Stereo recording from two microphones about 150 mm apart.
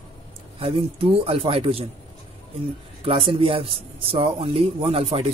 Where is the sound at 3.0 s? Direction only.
40° right (ahead or behind).